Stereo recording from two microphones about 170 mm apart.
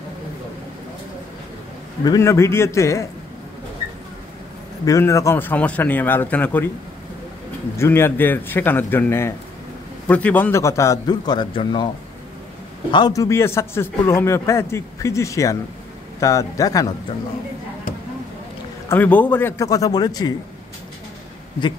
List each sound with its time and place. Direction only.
2.0 s a man's voice: 20° left (ahead or behind)
4.8 s a man's voice: 20° left (ahead or behind)
7.7 s a man's voice: 15° left (ahead or behind)
12.9 s a man's voice: 20° left (ahead or behind)
18.9 s a man's voice: 10° left (ahead or behind)